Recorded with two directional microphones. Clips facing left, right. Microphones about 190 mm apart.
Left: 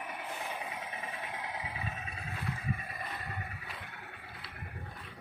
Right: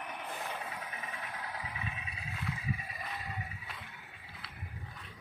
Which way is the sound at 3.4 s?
60° left (ahead or behind).